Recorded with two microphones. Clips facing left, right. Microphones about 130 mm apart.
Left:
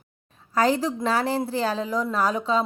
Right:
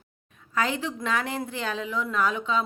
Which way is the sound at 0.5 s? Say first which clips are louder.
Left 6 dB; 35° left (ahead or behind).